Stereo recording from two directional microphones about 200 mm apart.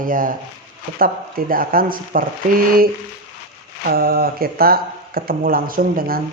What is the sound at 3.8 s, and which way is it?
Speech, 50° right (ahead or behind).